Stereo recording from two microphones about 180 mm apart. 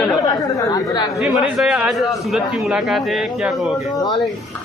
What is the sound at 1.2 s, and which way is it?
A man's voice, centre (ahead or behind).